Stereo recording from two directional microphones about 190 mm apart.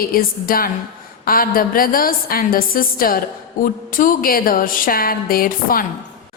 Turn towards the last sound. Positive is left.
turn(degrees=50)  # may be behind; listen again after turning